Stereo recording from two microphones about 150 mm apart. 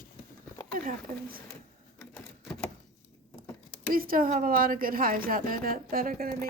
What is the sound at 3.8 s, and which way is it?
A woman's voice, 75° right (ahead or behind).